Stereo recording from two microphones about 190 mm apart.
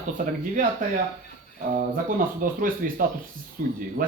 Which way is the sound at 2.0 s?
45° right (ahead or behind).